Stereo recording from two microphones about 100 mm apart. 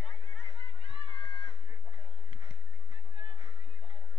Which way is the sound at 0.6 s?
70° right (ahead or behind).